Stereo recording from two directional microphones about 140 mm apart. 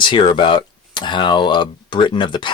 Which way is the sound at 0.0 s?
35° left (ahead or behind).